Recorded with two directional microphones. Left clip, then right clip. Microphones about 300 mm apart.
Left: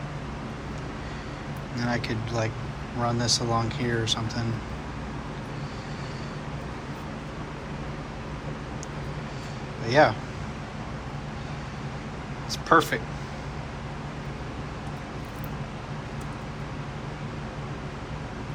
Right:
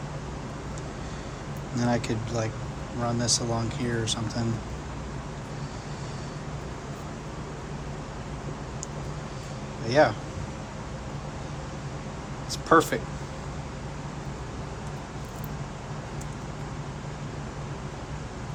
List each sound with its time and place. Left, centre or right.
1.8 s speech: centre
9.8 s speech: centre
12.5 s speech: centre